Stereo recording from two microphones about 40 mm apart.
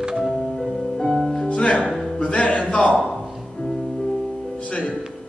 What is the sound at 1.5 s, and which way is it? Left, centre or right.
A man's voice, left.